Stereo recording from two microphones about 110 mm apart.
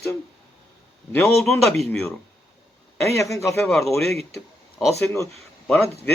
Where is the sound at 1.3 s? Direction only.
5° left (ahead or behind).